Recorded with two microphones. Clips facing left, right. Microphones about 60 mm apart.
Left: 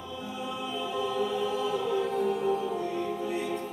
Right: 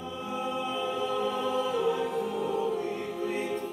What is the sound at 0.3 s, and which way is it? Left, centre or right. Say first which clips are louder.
Choir: right 4 dB; right.